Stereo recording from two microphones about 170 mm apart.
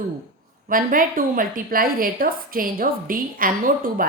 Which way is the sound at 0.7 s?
55° right (ahead or behind).